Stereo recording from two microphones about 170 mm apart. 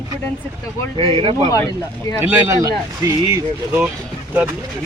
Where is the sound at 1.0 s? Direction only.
30° right (ahead or behind).